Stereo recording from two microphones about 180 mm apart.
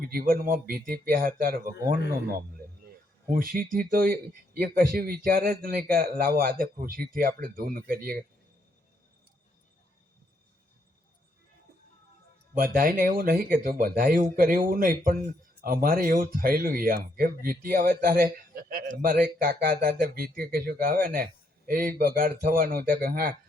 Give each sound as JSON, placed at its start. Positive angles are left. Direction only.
{"t": 0.0, "sound": "speech", "side_deg": -55}
{"t": 3.3, "sound": "speech", "side_deg": -50}
{"t": 12.5, "sound": "speech", "side_deg": -50}